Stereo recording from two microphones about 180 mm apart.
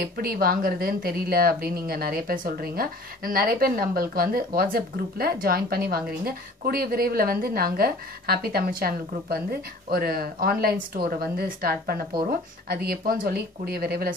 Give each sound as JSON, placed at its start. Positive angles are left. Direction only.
{"t": 0.0, "sound": "speech", "side_deg": -55}